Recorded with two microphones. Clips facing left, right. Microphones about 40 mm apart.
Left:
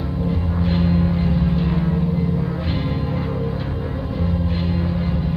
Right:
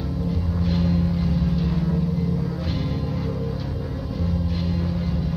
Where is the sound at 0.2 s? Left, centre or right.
Left.